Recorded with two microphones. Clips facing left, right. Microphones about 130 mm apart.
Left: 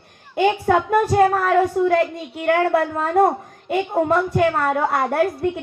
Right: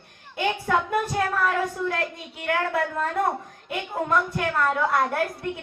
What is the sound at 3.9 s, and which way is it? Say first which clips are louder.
Speech: left 5 dB; 35° left (ahead or behind).